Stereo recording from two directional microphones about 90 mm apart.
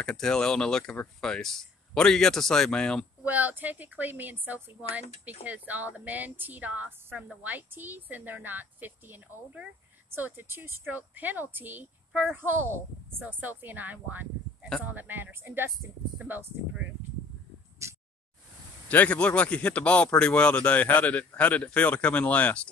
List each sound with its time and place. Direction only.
0.0 s a man's voice: 10° left (ahead or behind)
3.3 s speech: 20° right (ahead or behind)
17.8 s a sound: 30° right (ahead or behind)
18.9 s a man's voice: 15° left (ahead or behind)